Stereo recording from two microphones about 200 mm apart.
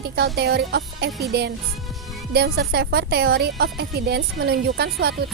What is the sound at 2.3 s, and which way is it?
Speech, 55° right (ahead or behind).